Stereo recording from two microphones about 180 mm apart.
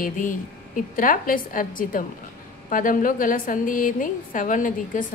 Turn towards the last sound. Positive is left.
turn(degrees=45)  # may be behind; listen again after turning